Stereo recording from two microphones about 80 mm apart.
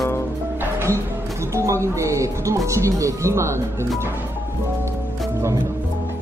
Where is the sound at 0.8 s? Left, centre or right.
Right.